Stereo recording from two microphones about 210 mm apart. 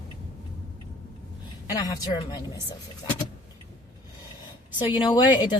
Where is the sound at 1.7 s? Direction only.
20° left (ahead or behind).